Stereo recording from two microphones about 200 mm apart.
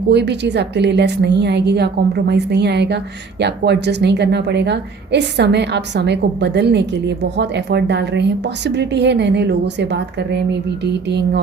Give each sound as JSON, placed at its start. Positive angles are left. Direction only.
{"t": 0.1, "sound": "a woman's voice", "side_deg": -60}